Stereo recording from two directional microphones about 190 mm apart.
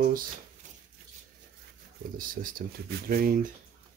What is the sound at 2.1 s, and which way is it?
Speech, 45° right (ahead or behind).